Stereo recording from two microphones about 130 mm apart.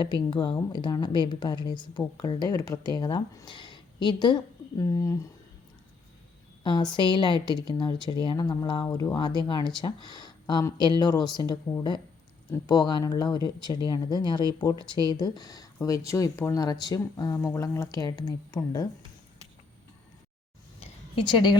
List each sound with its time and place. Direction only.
0.0 s a woman's voice: 35° left (ahead or behind)
6.6 s a woman's voice: 35° left (ahead or behind)
20.7 s a sound: 55° left (ahead or behind)
21.2 s a woman's voice: 35° left (ahead or behind)